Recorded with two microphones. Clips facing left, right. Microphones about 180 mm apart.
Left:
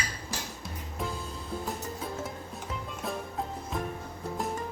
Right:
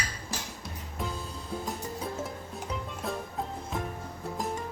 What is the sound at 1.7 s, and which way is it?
Music, centre (ahead or behind).